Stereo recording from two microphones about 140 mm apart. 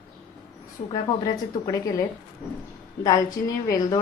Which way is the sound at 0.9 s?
25° left (ahead or behind).